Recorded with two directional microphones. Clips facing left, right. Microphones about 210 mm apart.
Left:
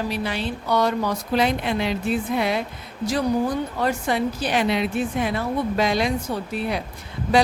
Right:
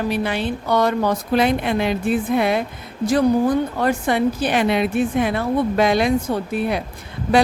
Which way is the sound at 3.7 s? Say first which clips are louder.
Right 4 dB; 55° right (ahead or behind).